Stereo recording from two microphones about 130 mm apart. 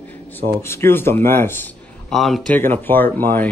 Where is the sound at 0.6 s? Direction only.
20° left (ahead or behind).